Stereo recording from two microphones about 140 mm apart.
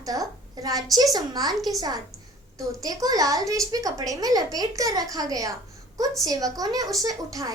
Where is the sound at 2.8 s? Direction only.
25° right (ahead or behind).